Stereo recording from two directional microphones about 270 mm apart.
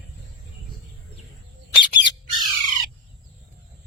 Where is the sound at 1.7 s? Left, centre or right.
Centre.